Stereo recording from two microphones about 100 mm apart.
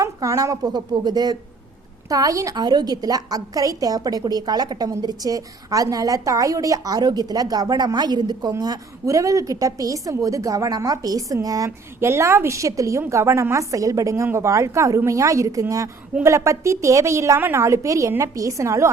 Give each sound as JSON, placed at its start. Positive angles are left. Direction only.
{"t": 0.0, "sound": "a woman's voice", "side_deg": -35}